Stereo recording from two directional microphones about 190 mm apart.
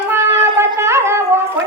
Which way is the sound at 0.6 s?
15° right (ahead or behind).